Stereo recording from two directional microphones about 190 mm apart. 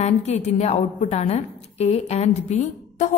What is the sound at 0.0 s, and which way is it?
A woman's voice, 35° left (ahead or behind).